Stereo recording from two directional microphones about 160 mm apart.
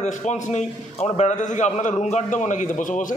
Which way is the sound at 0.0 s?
45° left (ahead or behind).